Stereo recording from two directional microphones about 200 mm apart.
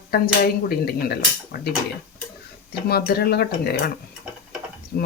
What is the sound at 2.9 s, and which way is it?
Speech, 50° left (ahead or behind).